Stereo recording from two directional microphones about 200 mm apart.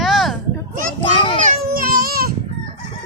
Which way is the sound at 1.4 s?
45° right (ahead or behind).